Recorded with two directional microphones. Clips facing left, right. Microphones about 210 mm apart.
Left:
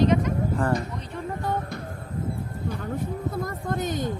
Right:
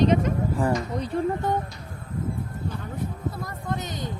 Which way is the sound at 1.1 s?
35° right (ahead or behind).